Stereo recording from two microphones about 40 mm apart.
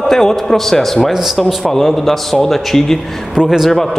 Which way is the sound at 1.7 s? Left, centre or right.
Centre.